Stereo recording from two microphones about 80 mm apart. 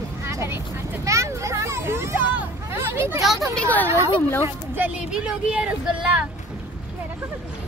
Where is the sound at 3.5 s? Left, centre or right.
Centre.